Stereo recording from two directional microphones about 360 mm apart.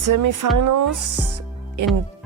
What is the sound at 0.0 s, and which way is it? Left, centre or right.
Speech, right.